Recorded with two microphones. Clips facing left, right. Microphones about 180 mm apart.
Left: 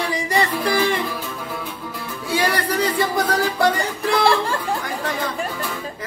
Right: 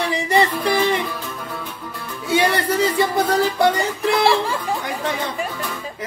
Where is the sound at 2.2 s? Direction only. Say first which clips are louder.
Right 3 dB; 25° right (ahead or behind).